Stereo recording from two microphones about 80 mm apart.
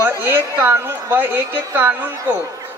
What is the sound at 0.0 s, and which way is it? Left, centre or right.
A woman's voice, right.